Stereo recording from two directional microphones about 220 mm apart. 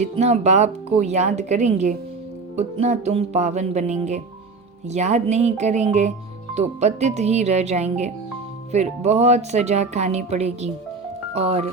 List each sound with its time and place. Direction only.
0.0 s speech: 30° right (ahead or behind)